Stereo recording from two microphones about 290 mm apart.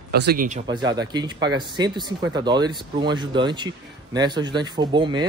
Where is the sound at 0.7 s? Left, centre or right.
Centre.